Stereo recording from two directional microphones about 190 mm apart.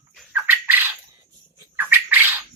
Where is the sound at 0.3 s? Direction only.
10° right (ahead or behind).